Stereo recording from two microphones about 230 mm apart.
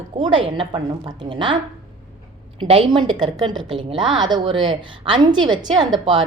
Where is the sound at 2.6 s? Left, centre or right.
Right.